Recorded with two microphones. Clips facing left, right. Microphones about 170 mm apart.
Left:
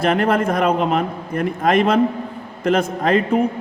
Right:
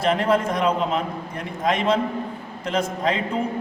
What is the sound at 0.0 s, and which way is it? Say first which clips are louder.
A man's voice: left 3 dB; 60° left (ahead or behind).